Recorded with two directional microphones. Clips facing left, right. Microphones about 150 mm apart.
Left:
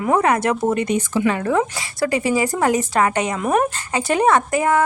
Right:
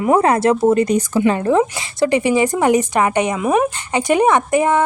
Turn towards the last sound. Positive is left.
turn(degrees=-20)  # may be behind; listen again after turning